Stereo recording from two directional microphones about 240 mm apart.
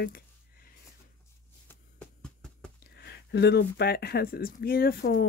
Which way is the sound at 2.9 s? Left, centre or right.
Left.